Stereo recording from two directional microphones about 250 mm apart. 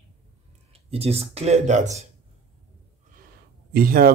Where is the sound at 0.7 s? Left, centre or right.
Right.